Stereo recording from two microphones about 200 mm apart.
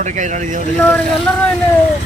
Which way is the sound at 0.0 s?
35° right (ahead or behind).